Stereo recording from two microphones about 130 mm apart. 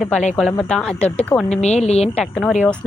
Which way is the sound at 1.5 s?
55° left (ahead or behind).